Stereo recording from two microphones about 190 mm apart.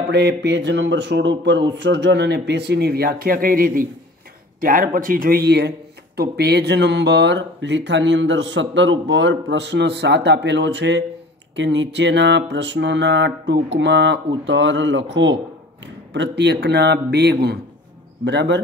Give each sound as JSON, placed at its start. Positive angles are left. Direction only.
{"t": 0.1, "sound": "speech", "side_deg": -65}